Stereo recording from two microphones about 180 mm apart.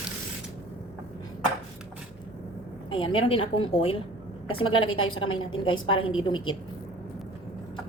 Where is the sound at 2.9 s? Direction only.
30° left (ahead or behind).